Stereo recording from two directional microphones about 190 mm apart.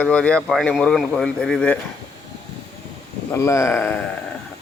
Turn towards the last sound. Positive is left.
turn(degrees=10)  # may be behind; listen again after turning